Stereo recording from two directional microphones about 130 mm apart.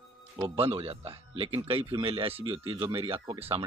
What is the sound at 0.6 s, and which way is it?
Speech, 50° right (ahead or behind).